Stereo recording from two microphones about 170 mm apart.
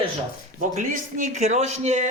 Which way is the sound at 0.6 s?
50° right (ahead or behind).